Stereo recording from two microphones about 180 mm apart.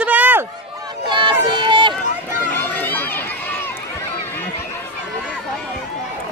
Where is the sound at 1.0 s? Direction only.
25° right (ahead or behind).